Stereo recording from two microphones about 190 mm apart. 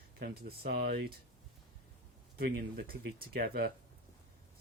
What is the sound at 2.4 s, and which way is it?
Speech, 55° right (ahead or behind).